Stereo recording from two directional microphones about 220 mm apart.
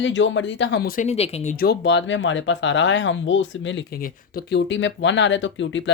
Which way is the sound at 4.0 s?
45° left (ahead or behind).